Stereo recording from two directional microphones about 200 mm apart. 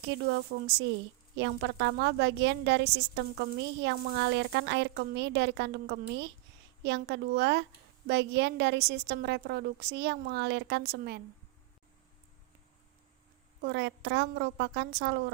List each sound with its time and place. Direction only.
0.1 s a woman's voice: 60° right (ahead or behind)
13.6 s a woman's voice: 55° right (ahead or behind)